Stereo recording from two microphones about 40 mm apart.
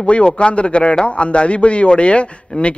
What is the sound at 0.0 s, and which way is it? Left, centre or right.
A man's voice, left.